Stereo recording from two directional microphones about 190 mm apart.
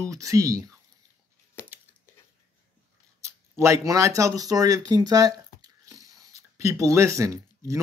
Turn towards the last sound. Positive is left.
turn(degrees=-15)  # may be behind; listen again after turning